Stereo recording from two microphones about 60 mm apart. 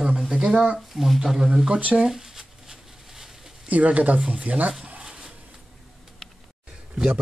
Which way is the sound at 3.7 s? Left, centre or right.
Right.